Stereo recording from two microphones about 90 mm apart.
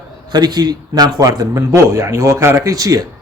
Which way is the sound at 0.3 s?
50° right (ahead or behind).